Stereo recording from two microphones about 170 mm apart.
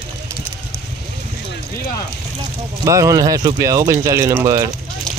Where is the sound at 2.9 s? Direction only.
20° right (ahead or behind).